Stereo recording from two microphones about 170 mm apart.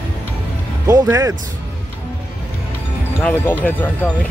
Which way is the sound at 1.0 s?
15° right (ahead or behind).